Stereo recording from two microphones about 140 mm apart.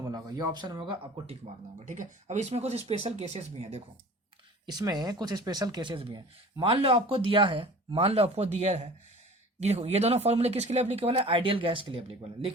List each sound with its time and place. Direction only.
0.0 s speech: 25° right (ahead or behind)
1.8 s speech: 60° right (ahead or behind)
4.6 s speech: 30° right (ahead or behind)